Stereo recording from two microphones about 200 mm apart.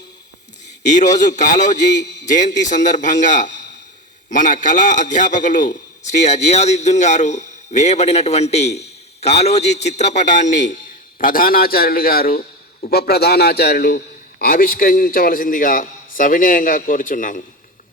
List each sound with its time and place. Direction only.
0.9 s a man's voice: 35° left (ahead or behind)